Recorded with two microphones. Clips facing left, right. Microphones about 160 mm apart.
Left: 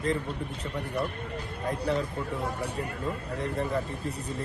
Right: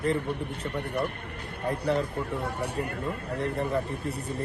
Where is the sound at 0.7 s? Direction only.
65° right (ahead or behind).